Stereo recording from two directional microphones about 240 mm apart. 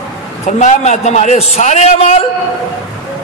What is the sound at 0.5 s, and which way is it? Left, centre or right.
A man's voice, left.